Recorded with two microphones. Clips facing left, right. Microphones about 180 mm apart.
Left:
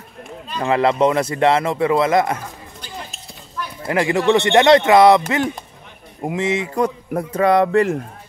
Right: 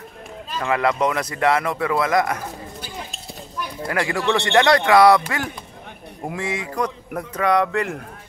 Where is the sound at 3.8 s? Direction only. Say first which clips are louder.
Left 5 dB; 25° left (ahead or behind).